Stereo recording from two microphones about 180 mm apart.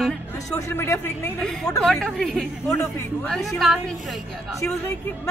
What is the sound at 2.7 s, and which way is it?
Speech, 15° left (ahead or behind).